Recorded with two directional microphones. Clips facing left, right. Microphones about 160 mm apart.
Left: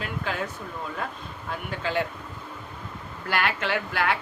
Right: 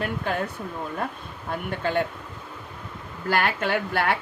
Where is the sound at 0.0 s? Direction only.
55° right (ahead or behind).